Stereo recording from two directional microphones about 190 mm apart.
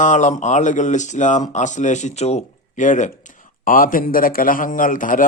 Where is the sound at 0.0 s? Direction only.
40° left (ahead or behind).